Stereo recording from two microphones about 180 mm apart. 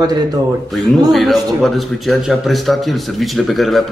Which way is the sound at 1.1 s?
Centre (ahead or behind).